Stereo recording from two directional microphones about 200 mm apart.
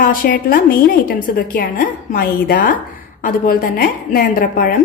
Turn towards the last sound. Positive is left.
turn(degrees=45)  # may be behind; listen again after turning